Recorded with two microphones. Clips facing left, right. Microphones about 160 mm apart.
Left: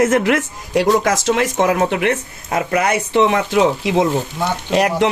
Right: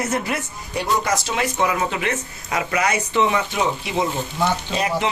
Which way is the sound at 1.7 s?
60° left (ahead or behind).